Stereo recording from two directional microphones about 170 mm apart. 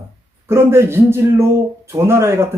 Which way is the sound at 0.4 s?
15° right (ahead or behind).